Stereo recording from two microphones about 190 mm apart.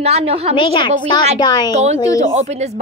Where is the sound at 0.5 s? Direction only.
25° left (ahead or behind).